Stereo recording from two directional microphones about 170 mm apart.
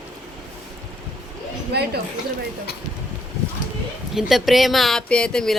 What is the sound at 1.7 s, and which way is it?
Speech, 75° right (ahead or behind).